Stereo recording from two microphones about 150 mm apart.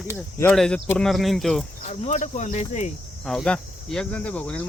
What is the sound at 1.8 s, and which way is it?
Speech, 50° left (ahead or behind).